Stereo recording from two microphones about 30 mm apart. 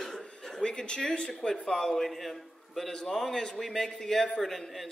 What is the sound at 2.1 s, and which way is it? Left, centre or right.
Speech, centre.